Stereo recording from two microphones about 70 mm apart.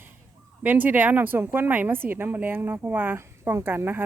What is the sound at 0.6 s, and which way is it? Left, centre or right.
A woman's voice, right.